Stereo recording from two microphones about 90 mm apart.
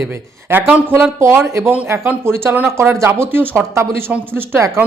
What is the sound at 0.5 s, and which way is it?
A man's voice, 20° right (ahead or behind).